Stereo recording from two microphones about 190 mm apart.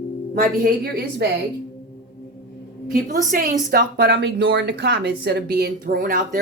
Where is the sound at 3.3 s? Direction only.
45° right (ahead or behind).